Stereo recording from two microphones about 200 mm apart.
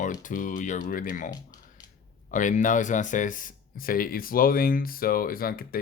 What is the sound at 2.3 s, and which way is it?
Speech, 40° left (ahead or behind).